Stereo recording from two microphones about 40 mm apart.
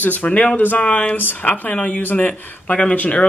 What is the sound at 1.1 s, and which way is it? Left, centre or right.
Speech, left.